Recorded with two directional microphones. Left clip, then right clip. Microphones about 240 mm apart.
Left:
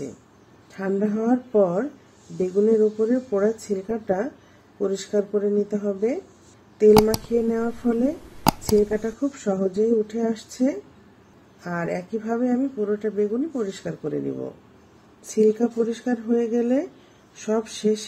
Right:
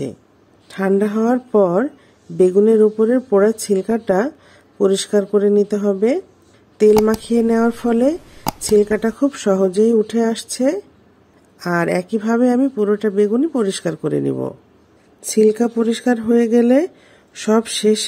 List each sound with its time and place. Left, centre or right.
0.7 s speech: right
6.9 s speech: centre
7.4 s speech: right
8.5 s a sound: centre
9.0 s speech: right
15.3 s speech: right